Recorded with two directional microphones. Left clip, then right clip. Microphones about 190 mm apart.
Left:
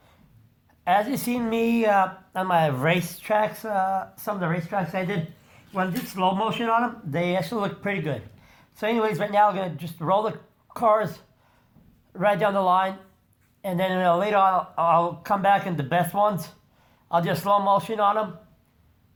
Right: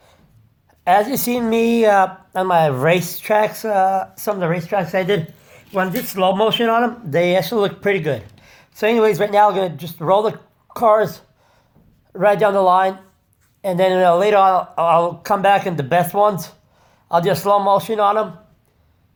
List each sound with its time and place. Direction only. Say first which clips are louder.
0.9 s a woman's voice: right 7 dB; 25° right (ahead or behind)